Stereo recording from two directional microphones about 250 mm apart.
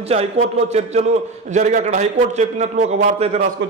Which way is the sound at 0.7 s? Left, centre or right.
Right.